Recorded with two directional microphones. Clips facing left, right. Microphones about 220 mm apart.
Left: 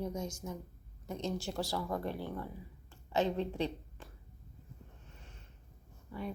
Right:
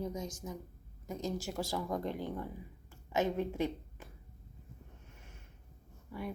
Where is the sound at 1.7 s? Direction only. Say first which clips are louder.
Right 3 dB; 15° right (ahead or behind).